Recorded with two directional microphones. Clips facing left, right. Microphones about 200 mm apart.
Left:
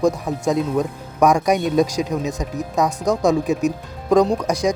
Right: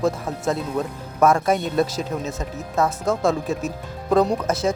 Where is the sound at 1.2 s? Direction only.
15° left (ahead or behind).